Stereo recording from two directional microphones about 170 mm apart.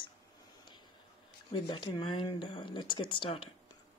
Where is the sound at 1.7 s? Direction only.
30° left (ahead or behind).